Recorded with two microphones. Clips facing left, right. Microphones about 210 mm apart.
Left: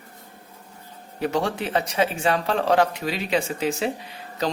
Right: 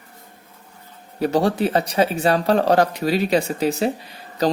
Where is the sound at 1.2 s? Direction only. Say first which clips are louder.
Right 6 dB; 35° right (ahead or behind).